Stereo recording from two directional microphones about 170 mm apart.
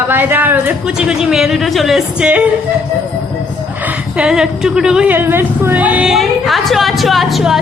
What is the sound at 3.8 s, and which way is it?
A woman's voice, 5° right (ahead or behind).